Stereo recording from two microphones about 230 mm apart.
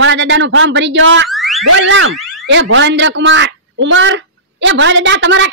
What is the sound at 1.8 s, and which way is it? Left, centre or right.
Speech, right.